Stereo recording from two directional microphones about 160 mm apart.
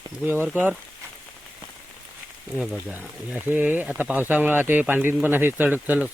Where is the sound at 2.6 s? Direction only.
5° right (ahead or behind).